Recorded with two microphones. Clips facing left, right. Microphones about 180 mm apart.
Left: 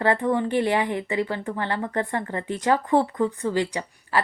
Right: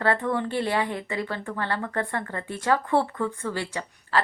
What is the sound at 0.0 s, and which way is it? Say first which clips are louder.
Speech: left 3 dB; 15° left (ahead or behind).